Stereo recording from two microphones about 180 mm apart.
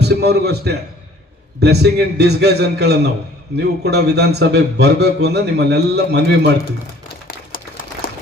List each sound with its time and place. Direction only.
0.0 s a man's voice: 65° right (ahead or behind)
7.3 s typewriter: 50° left (ahead or behind)